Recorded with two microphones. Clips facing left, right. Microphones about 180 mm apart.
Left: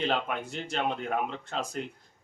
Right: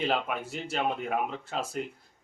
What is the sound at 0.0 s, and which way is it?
Speech, 5° right (ahead or behind).